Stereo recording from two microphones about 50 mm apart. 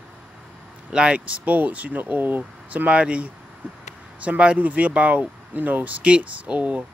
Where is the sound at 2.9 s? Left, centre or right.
Right.